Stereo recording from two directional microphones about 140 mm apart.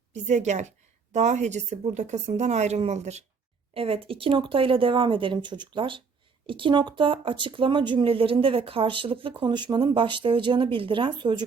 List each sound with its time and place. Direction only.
0.1 s speech: 55° right (ahead or behind)
3.8 s speech: 40° right (ahead or behind)